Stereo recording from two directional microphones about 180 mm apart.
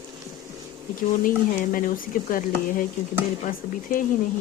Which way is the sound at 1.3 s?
50° left (ahead or behind).